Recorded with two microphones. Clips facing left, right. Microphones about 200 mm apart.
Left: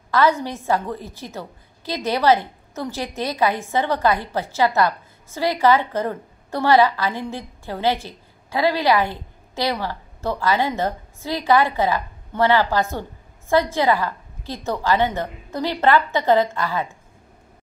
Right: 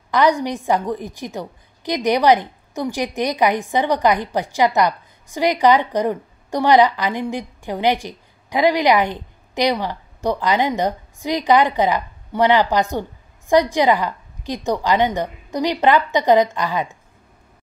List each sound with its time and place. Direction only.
0.1 s a woman's voice: 15° right (ahead or behind)